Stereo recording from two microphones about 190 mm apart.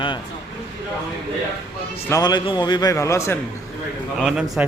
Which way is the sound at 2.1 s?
20° left (ahead or behind).